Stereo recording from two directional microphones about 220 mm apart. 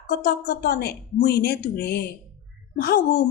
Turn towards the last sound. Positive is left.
turn(degrees=45)  # may be behind; listen again after turning